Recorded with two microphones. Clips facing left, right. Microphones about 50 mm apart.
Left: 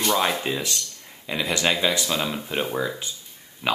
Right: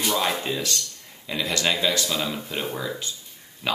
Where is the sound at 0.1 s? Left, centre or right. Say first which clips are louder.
Left 3 dB; centre.